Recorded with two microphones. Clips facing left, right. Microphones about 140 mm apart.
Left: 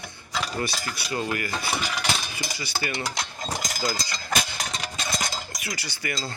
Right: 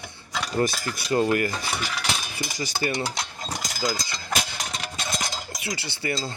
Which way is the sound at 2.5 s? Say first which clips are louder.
Right 5 dB; 40° right (ahead or behind).